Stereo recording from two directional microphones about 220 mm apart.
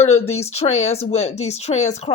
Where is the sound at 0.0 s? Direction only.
30° left (ahead or behind).